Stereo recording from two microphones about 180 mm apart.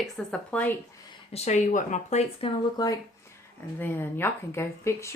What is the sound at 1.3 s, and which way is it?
Speech, 40° left (ahead or behind).